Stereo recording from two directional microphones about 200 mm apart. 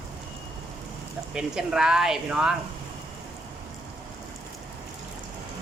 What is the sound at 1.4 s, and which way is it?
Speech, 5° right (ahead or behind).